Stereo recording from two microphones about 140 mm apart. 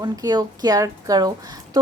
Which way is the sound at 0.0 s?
30° right (ahead or behind).